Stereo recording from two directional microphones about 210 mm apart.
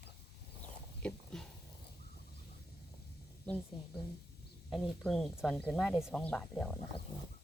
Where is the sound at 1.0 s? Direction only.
5° left (ahead or behind).